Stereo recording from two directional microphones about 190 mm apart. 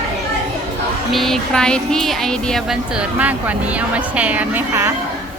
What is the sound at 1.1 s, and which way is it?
A woman's voice, centre (ahead or behind).